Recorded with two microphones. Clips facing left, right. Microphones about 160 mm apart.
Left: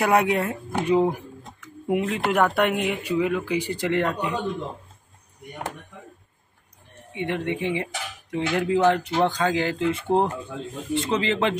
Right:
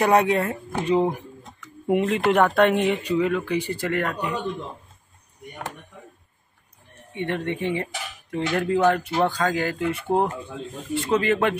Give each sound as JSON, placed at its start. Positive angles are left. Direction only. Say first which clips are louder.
{"t": 0.0, "sound": "speech", "louder": "right 2 dB", "side_deg": 10}
{"t": 1.9, "sound": "speech", "louder": "right 3 dB", "side_deg": 0}
{"t": 7.1, "sound": "speech", "louder": "even", "side_deg": 10}
{"t": 10.0, "sound": "speech", "louder": "even", "side_deg": -10}
{"t": 11.0, "sound": "speech", "louder": "right 3 dB", "side_deg": 20}